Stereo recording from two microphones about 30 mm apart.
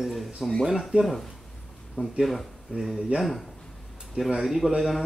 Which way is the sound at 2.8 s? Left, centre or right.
Centre.